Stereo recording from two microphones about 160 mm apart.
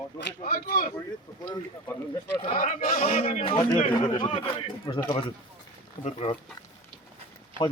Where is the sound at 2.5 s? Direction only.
50° left (ahead or behind).